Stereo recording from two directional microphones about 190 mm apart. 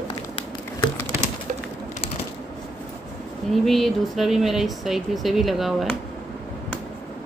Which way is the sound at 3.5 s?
Centre (ahead or behind).